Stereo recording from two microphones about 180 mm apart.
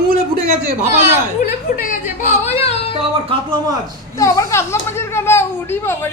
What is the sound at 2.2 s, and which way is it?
Yodeling, 40° left (ahead or behind).